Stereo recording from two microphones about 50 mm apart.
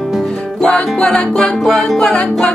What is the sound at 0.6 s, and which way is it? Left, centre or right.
Music, centre.